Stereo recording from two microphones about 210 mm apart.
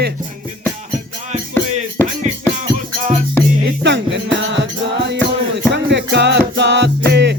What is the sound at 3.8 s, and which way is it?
Music, 55° right (ahead or behind).